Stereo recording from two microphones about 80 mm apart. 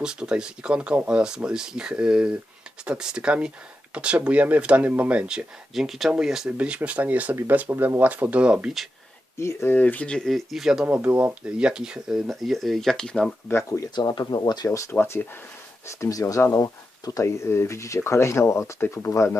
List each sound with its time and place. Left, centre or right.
0.0 s speech: centre
5.7 s speech: centre
9.4 s speech: left
9.7 s speech: centre
10.2 s speech: centre
10.8 s speech: right; by 13.3 s centre
13.9 s speech: left
14.7 s speech: left
14.9 s speech: left
15.9 s speech: left